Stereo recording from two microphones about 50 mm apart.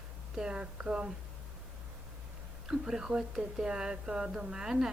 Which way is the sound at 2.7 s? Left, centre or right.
Centre.